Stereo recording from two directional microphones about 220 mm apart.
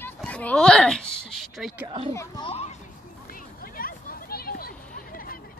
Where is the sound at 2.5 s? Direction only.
30° left (ahead or behind).